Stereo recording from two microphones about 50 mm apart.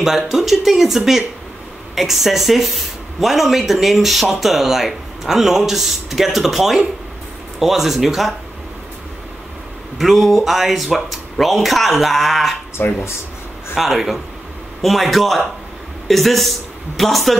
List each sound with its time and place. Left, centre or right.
0.0 s speech: centre
9.9 s speech: centre
12.8 s speech: left
13.7 s speech: centre